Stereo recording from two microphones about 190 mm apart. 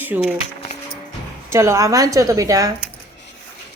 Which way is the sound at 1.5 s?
15° right (ahead or behind).